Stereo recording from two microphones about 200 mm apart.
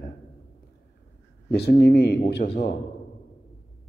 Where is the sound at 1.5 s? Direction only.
55° left (ahead or behind).